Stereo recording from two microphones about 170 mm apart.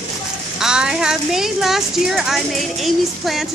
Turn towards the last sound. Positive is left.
turn(degrees=0)  # may be behind; listen again after turning